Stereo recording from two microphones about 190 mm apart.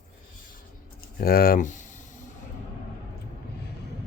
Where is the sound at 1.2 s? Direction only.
50° left (ahead or behind).